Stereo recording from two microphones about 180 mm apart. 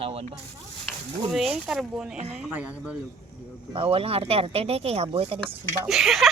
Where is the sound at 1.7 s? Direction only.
5° right (ahead or behind).